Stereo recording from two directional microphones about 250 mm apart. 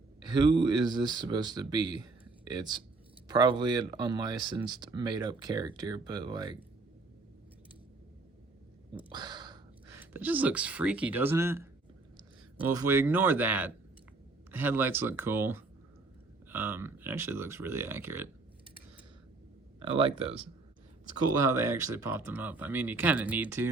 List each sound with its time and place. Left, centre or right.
0.3 s speech: centre
9.1 s speech: centre
19.9 s speech: right
21.5 s speech: centre